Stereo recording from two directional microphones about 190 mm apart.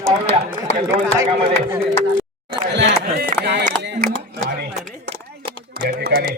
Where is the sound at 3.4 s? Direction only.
60° right (ahead or behind).